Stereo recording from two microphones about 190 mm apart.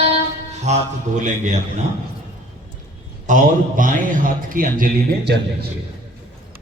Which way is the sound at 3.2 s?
45° right (ahead or behind).